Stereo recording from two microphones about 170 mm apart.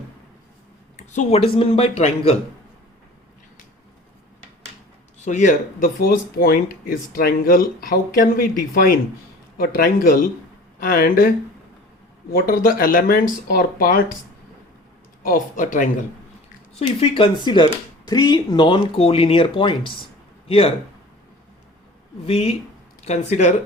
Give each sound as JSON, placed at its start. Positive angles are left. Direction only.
{"t": 0.9, "sound": "speech", "side_deg": 45}
{"t": 5.2, "sound": "speech", "side_deg": 45}
{"t": 12.3, "sound": "speech", "side_deg": 60}
{"t": 15.2, "sound": "speech", "side_deg": 55}
{"t": 17.0, "sound": "speech", "side_deg": 30}
{"t": 22.3, "sound": "speech", "side_deg": 35}